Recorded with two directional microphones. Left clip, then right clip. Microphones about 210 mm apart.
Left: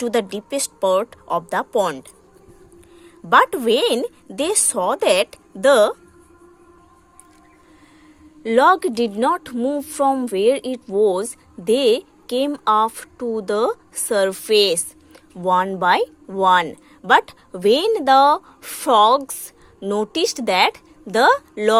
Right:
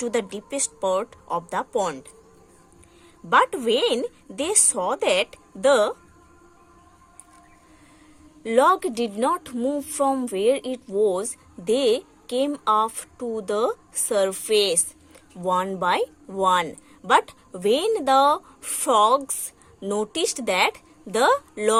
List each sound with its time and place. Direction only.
0.0 s a woman's voice: 20° left (ahead or behind)
8.4 s a woman's voice: 15° left (ahead or behind)